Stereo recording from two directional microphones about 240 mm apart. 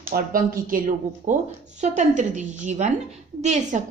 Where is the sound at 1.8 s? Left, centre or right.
Right.